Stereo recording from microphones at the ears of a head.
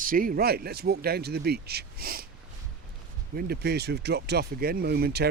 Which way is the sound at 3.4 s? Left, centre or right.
Right.